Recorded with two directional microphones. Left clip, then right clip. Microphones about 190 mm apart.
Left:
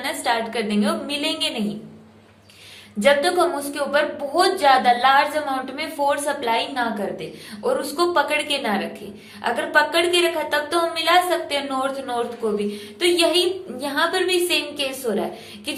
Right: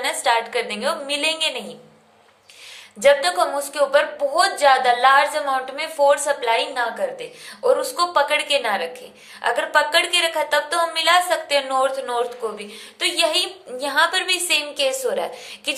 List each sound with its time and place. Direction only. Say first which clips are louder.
0.0 s a woman's voice: right 3 dB; 25° right (ahead or behind)
3.0 s a woman's voice: right 1 dB; 20° right (ahead or behind)